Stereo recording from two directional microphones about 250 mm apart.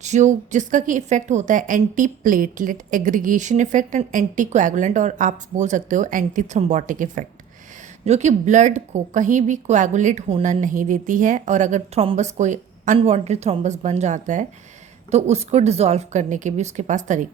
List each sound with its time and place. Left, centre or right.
0.0 s a woman's voice: right